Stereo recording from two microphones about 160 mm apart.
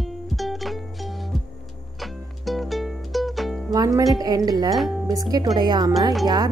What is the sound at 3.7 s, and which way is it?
A woman's voice, 25° right (ahead or behind).